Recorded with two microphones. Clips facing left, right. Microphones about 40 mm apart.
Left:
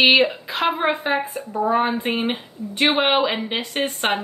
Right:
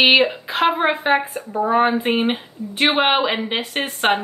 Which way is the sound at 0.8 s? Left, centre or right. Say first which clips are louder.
Right 3 dB; centre.